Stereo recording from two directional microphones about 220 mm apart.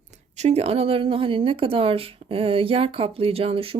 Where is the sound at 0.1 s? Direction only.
30° right (ahead or behind).